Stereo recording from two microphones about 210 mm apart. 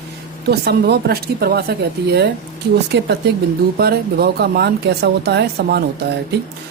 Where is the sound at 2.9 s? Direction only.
55° right (ahead or behind).